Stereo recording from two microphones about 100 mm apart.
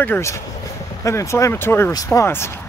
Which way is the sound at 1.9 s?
35° left (ahead or behind).